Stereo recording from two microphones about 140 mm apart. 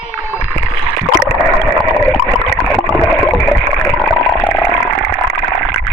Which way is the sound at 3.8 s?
10° left (ahead or behind).